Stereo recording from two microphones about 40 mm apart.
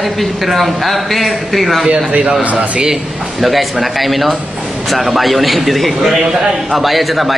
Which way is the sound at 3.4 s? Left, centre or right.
Centre.